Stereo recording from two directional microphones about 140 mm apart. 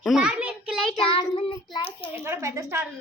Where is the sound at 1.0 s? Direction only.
40° left (ahead or behind).